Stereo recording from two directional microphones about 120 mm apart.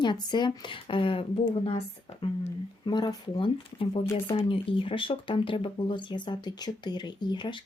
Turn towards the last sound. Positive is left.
turn(degrees=40)  # may be behind; listen again after turning